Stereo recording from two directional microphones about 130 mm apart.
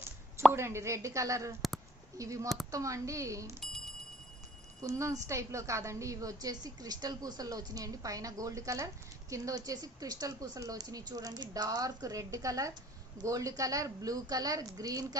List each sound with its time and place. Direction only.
0.5 s a woman's voice: 20° right (ahead or behind)
4.8 s a woman's voice: 25° right (ahead or behind)